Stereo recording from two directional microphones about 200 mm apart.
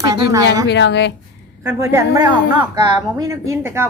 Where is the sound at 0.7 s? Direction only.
60° left (ahead or behind).